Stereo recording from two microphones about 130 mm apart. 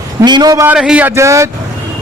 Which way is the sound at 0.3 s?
30° right (ahead or behind).